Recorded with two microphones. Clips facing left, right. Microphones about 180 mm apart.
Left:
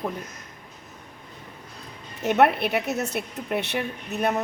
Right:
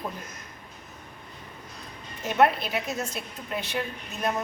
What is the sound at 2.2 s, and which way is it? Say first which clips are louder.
A woman's voice: left 3 dB; 65° left (ahead or behind).